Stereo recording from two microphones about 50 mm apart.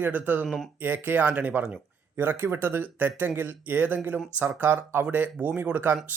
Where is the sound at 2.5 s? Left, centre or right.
Right.